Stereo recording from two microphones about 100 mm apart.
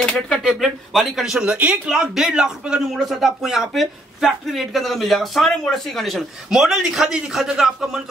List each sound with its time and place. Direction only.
0.0 s speech: 5° left (ahead or behind)